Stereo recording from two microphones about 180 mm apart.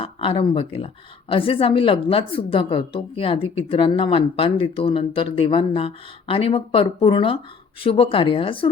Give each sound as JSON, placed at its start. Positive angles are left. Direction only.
{"t": 0.0, "sound": "a woman's voice", "side_deg": 30}